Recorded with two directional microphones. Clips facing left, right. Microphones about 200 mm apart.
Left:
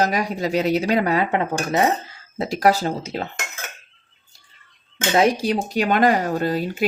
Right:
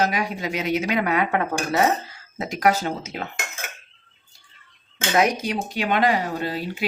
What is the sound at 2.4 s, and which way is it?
Speech, 35° left (ahead or behind).